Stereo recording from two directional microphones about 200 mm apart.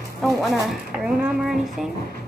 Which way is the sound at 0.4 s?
Centre (ahead or behind).